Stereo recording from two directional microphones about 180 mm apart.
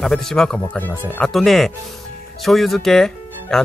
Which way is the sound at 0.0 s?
Centre (ahead or behind).